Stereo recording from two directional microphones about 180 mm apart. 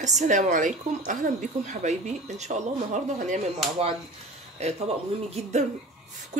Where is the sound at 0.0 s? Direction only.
40° right (ahead or behind).